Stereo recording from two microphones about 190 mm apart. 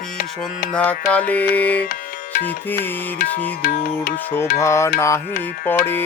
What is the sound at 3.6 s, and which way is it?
Music, 45° left (ahead or behind).